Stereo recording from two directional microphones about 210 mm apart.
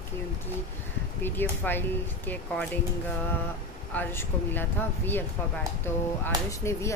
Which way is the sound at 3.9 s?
10° left (ahead or behind).